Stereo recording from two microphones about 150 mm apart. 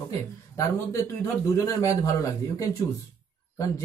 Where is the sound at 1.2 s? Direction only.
20° left (ahead or behind).